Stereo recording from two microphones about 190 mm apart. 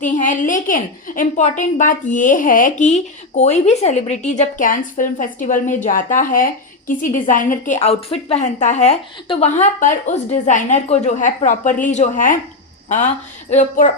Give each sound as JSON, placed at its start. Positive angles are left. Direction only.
{"t": 0.0, "sound": "a woman's voice", "side_deg": 40}
{"t": 13.5, "sound": "a woman's voice", "side_deg": 40}